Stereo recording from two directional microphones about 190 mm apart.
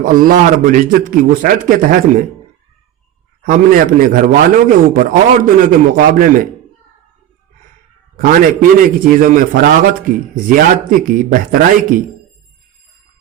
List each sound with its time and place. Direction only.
0.0 s a man's voice: 45° right (ahead or behind)
3.4 s a man's voice: 45° right (ahead or behind)
8.1 s a man's voice: 45° right (ahead or behind)